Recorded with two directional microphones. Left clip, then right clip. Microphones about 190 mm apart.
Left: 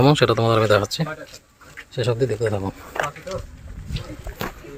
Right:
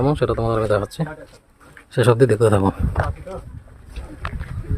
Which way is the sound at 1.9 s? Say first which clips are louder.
Right 7 dB; 45° right (ahead or behind).